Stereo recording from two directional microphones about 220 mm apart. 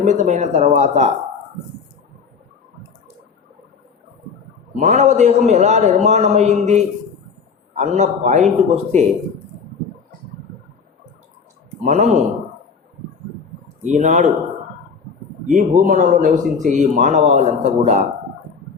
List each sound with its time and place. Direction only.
0.0 s speech: 35° right (ahead or behind)
4.8 s speech: 30° right (ahead or behind)
11.8 s speech: 30° right (ahead or behind)
13.8 s speech: 35° right (ahead or behind)
15.4 s speech: 35° right (ahead or behind)